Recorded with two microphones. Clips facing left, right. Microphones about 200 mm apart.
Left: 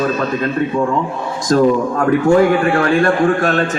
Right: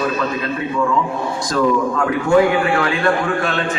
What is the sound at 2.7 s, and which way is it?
Speech, 45° left (ahead or behind).